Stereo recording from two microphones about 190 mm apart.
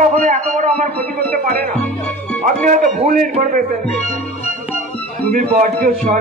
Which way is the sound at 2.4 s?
45° right (ahead or behind).